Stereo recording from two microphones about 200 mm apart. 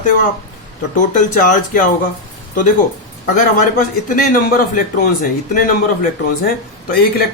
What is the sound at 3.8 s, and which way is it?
Speech, 40° left (ahead or behind).